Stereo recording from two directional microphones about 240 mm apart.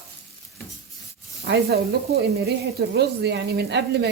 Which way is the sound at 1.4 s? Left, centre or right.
Right.